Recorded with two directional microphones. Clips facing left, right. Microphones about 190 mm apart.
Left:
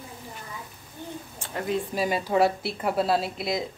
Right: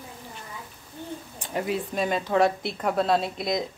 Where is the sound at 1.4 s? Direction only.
15° right (ahead or behind).